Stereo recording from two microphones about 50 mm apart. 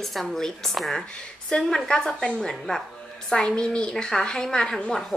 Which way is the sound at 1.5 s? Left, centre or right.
Left.